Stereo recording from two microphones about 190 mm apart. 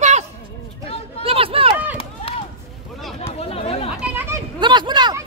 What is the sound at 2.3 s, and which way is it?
Chop, 30° left (ahead or behind).